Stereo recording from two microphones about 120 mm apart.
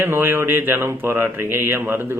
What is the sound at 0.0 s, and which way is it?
A man's voice, 20° right (ahead or behind).